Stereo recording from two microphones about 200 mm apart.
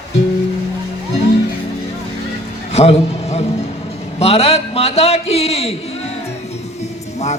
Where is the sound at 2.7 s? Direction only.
30° left (ahead or behind).